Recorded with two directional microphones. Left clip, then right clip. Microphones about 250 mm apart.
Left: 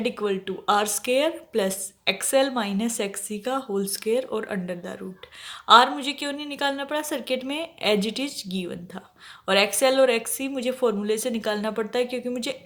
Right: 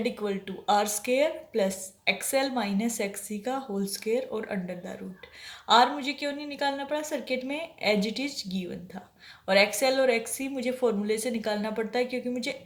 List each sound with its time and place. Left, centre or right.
0.0 s speech: left